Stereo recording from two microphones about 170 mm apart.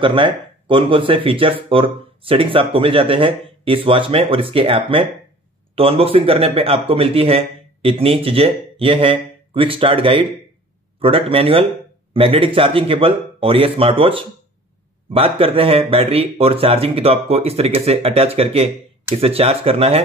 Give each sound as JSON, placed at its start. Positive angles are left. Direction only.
{"t": 0.0, "sound": "a man's voice", "side_deg": -30}